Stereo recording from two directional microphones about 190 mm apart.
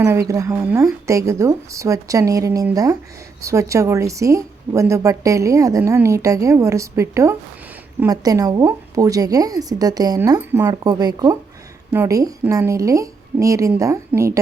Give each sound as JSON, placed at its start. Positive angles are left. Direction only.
{"t": 0.0, "sound": "a woman's voice", "side_deg": -15}